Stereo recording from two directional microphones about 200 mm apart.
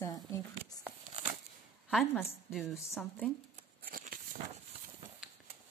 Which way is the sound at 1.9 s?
Centre (ahead or behind).